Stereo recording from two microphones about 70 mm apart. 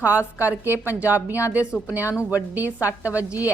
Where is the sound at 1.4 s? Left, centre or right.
Left.